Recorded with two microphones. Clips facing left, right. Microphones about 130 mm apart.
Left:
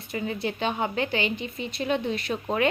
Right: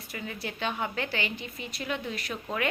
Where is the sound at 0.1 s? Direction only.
25° left (ahead or behind).